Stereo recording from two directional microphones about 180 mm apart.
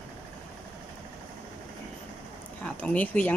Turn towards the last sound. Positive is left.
turn(degrees=10)  # may be behind; listen again after turning